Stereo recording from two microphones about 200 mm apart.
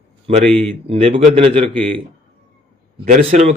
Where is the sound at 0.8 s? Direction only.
25° right (ahead or behind).